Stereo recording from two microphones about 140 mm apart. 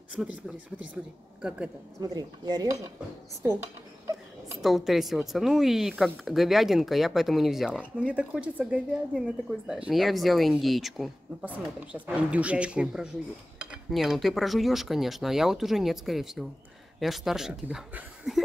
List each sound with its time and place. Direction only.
0.1 s a woman's voice: 10° right (ahead or behind)
2.0 s speech: 30° right (ahead or behind)
4.6 s a woman's voice: centre (ahead or behind)